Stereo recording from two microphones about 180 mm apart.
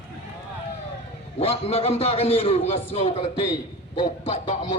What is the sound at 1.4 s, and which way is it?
A man's voice, 35° left (ahead or behind).